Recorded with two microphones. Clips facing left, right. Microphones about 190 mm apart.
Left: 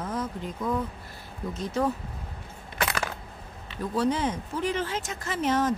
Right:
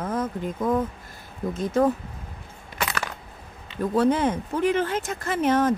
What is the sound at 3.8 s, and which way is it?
Speech, 55° right (ahead or behind).